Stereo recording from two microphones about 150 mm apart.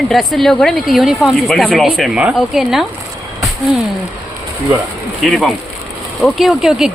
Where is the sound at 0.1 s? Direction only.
Centre (ahead or behind).